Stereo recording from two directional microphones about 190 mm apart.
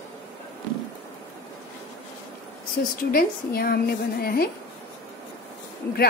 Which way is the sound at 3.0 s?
50° left (ahead or behind).